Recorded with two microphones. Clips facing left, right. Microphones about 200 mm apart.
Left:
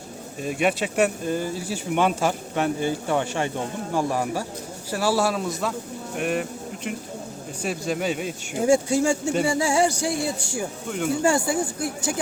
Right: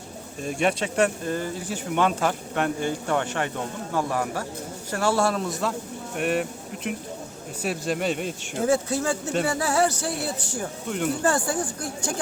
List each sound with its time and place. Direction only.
0.4 s a man's voice: 5° left (ahead or behind)